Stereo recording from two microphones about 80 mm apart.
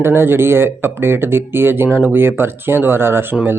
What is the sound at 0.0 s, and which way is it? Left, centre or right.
A man's voice, right.